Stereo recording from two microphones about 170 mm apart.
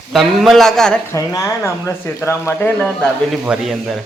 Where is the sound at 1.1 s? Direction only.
20° left (ahead or behind).